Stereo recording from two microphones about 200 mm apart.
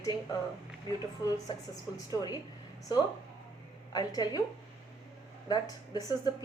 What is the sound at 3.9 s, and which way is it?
Speech, 20° left (ahead or behind).